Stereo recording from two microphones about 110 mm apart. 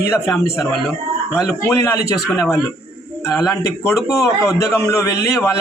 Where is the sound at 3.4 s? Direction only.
30° left (ahead or behind).